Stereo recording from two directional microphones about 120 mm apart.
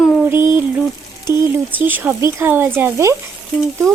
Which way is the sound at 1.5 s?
15° right (ahead or behind).